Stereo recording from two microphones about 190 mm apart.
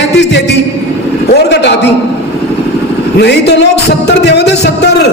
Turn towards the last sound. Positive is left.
turn(degrees=60)  # may be behind; listen again after turning